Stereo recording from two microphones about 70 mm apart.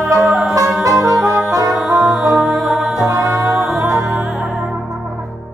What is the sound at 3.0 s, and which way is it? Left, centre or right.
Music, right.